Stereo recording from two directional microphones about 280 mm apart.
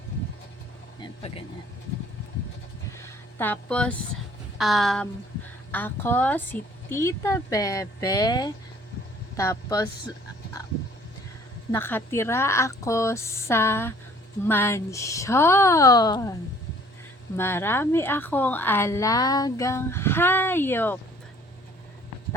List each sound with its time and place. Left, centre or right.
1.0 s speech: centre
3.0 s a sound: centre
5.7 s a woman's voice: centre
11.7 s a woman's voice: centre
17.3 s a woman's voice: centre